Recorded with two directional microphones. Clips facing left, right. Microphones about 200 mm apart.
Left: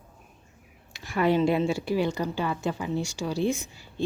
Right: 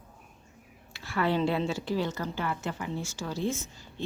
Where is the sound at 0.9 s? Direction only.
15° left (ahead or behind).